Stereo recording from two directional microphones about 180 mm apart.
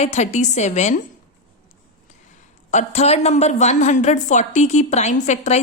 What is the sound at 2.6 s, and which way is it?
A woman's voice, 40° left (ahead or behind).